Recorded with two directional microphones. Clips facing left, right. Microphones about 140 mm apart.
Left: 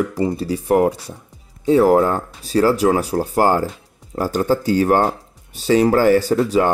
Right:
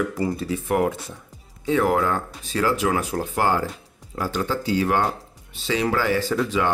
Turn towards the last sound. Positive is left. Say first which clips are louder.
# left 6 dB
turn(degrees=40)  # may be behind; listen again after turning